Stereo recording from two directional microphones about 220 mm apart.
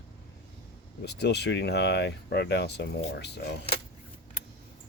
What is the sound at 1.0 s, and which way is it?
Speech, 50° left (ahead or behind).